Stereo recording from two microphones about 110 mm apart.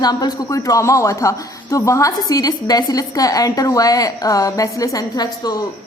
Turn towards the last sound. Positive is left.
turn(degrees=35)  # may be behind; listen again after turning